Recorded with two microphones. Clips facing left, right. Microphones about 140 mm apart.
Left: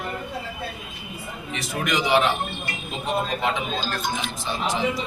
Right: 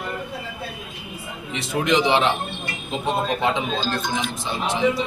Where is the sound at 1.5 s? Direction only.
25° right (ahead or behind).